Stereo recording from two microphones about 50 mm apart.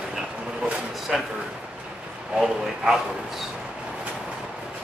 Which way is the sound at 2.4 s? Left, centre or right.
Centre.